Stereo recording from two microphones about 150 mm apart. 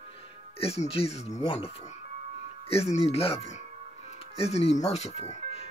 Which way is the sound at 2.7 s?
45° left (ahead or behind).